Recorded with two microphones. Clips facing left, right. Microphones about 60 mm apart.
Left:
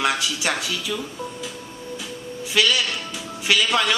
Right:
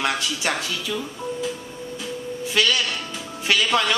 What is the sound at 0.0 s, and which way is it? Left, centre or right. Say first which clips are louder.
Speech: left 1 dB; centre.